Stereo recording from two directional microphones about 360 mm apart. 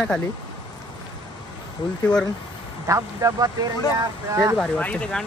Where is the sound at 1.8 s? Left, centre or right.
Centre.